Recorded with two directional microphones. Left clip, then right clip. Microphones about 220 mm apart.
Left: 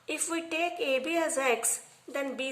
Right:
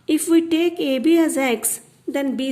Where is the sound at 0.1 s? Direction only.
40° right (ahead or behind).